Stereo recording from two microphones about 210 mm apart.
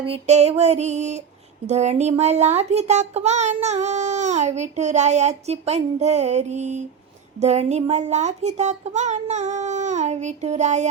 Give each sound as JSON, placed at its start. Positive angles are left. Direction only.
{"t": 0.0, "sound": "a child's voice", "side_deg": -30}